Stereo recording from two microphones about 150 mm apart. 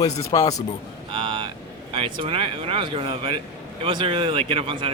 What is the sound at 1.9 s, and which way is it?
A man's voice, 35° right (ahead or behind).